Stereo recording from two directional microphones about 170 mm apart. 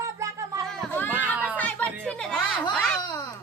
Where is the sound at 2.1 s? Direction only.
5° left (ahead or behind).